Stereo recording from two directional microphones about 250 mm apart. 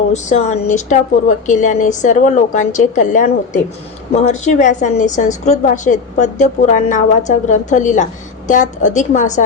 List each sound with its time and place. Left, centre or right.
0.1 s a woman's voice: left